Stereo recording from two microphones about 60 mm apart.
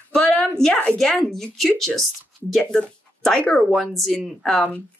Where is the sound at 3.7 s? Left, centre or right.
Centre.